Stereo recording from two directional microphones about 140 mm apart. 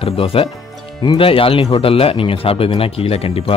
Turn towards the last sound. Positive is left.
turn(degrees=45)  # may be behind; listen again after turning